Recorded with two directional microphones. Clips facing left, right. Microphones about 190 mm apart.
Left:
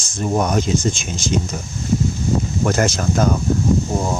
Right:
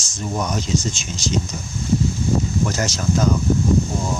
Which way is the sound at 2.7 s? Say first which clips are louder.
Left 4 dB; 55° left (ahead or behind).